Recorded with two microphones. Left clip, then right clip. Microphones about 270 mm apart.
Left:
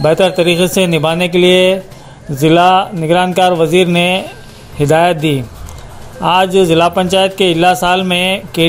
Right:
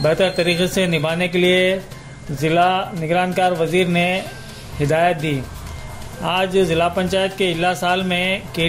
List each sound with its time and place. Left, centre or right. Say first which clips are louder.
0.0 s a man's voice: left 6 dB; left
6.2 s a man's voice: left 8 dB; left